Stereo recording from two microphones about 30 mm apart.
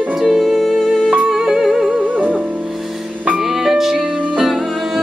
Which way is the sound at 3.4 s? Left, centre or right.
Centre.